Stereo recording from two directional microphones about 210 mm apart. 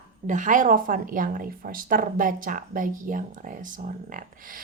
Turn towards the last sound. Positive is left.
turn(degrees=-40)  # may be behind; listen again after turning